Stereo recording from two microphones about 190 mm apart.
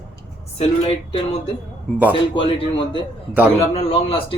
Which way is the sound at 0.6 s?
30° left (ahead or behind).